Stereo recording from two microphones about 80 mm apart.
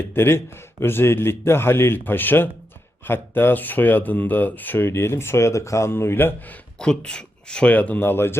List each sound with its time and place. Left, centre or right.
0.0 s speech: left
6.7 s speech: centre; by 8.4 s left